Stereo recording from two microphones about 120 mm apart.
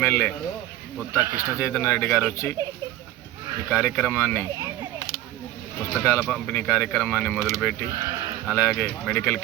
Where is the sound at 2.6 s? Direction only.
25° right (ahead or behind).